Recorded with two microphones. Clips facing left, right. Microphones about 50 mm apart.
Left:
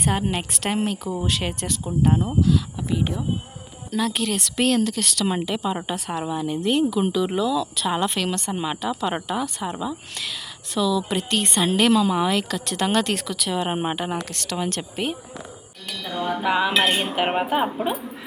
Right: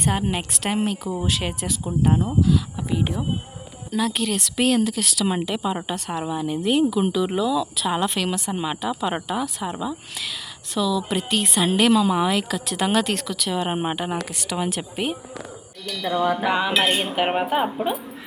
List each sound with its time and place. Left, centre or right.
0.0 s speech: centre
3.0 s speech: centre
3.9 s speech: centre
16.4 s speech: centre